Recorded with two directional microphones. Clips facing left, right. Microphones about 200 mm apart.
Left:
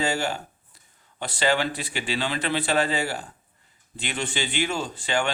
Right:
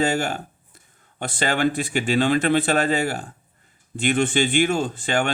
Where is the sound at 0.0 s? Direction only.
50° right (ahead or behind).